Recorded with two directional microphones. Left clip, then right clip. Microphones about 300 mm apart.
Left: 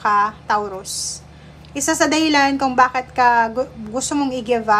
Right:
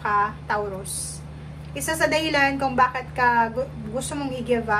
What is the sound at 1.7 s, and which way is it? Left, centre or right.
A woman's voice, centre.